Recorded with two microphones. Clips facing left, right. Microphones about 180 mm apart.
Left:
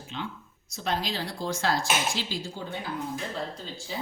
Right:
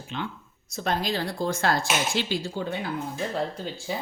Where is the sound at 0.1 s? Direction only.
60° right (ahead or behind).